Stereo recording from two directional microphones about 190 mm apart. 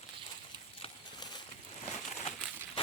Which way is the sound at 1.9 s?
35° left (ahead or behind).